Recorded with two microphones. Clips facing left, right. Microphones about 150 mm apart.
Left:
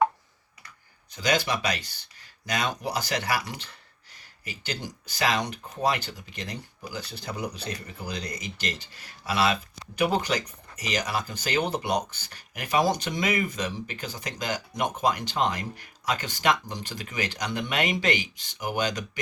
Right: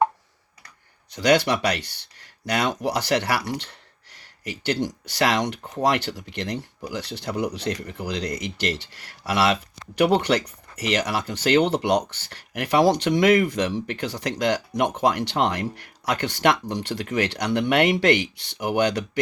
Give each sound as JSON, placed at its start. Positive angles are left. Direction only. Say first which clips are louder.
{"t": 1.1, "sound": "speech", "louder": "right 7 dB", "side_deg": -70}